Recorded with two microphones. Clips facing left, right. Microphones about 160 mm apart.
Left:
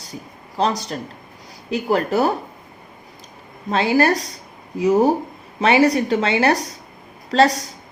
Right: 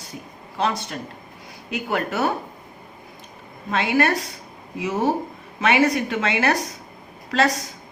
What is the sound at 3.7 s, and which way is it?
A woman's voice, 35° left (ahead or behind).